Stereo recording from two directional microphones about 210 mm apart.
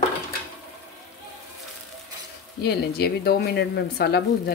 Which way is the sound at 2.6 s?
50° left (ahead or behind).